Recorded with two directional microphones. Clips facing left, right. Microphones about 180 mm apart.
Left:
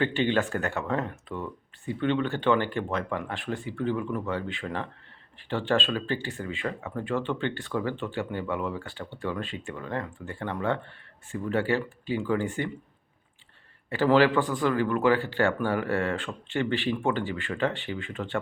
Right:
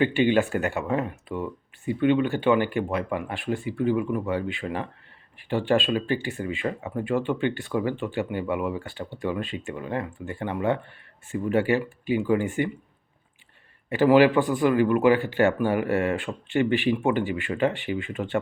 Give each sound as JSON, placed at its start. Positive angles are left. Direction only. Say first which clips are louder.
{"t": 0.0, "sound": "speech", "louder": "right 4 dB", "side_deg": -15}
{"t": 13.9, "sound": "speech", "louder": "right 4 dB", "side_deg": -15}